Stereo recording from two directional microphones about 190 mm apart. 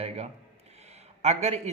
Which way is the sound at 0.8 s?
35° right (ahead or behind).